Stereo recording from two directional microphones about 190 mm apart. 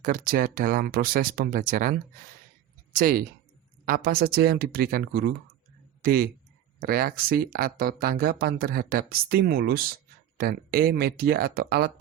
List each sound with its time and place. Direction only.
0.0 s speech: 50° right (ahead or behind)